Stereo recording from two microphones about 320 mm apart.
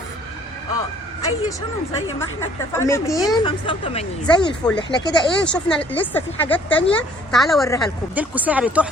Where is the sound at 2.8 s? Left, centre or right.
Centre.